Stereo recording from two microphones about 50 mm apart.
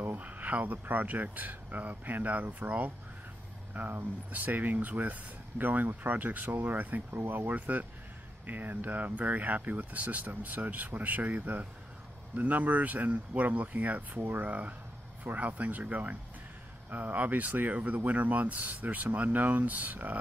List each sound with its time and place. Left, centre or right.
0.0 s speech: right
3.7 s speech: right
7.1 s speech: right